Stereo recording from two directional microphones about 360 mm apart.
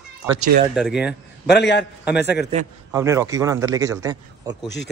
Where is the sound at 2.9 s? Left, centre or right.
Centre.